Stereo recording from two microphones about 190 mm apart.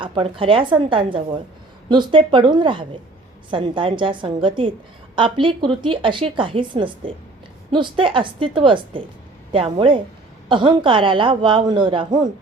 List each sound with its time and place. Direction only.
0.0 s a woman's voice: 30° right (ahead or behind)